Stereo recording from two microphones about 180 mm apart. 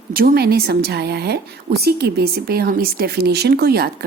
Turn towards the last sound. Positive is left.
turn(degrees=-60)  # may be behind; listen again after turning